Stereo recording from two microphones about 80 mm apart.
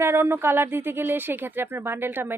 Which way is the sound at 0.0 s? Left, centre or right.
Right.